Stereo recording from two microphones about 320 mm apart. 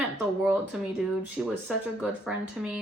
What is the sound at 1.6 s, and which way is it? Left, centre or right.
A woman's voice, centre.